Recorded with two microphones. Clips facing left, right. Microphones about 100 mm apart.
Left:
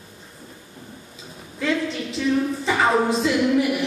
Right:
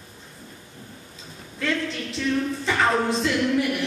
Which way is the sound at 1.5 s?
5° left (ahead or behind).